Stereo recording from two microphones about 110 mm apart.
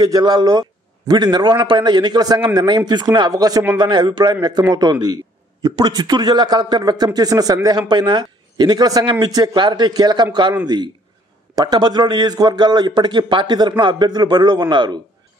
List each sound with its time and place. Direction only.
0.0 s a man's voice: 35° right (ahead or behind)
11.5 s a man's voice: 40° right (ahead or behind)